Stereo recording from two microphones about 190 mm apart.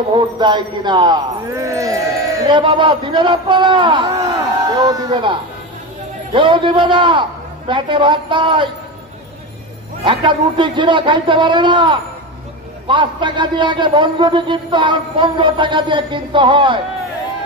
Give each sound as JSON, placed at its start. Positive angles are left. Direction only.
{"t": 0.1, "sound": "speech", "side_deg": -25}
{"t": 10.0, "sound": "speech", "side_deg": -25}